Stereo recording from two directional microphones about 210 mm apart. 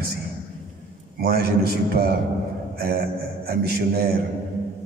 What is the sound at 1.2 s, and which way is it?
Speech, 45° right (ahead or behind).